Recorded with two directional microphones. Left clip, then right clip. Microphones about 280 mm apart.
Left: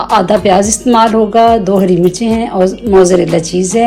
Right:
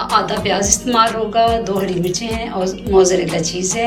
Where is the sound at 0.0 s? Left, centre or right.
Centre.